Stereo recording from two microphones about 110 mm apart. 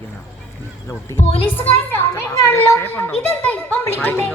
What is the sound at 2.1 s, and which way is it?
A child's voice, 25° left (ahead or behind).